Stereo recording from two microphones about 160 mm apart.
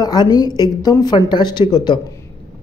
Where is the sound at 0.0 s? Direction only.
25° left (ahead or behind).